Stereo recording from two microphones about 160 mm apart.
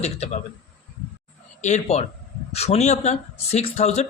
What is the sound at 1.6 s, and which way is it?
Speech, 45° left (ahead or behind).